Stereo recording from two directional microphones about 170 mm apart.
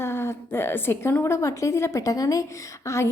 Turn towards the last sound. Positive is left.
turn(degrees=15)  # may be behind; listen again after turning